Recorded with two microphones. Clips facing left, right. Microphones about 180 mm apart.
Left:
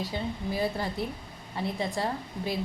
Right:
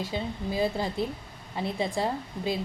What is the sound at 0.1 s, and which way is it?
Speech, 20° right (ahead or behind).